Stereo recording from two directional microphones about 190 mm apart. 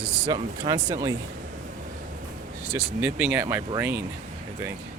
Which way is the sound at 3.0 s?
5° right (ahead or behind).